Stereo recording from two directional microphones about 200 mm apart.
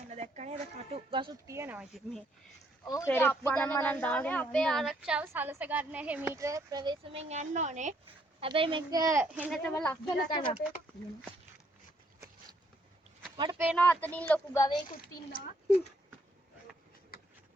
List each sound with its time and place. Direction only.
0.1 s a sound: 35° right (ahead or behind)
1.5 s speech: 10° right (ahead or behind)
2.8 s a woman's voice: 15° left (ahead or behind); by 9.6 s 5° right (ahead or behind)
9.6 s speech: 5° left (ahead or behind)
13.3 s speech: 20° right (ahead or behind)
13.7 s speech: 10° left (ahead or behind)
14.8 s a woman's voice: 45° left (ahead or behind)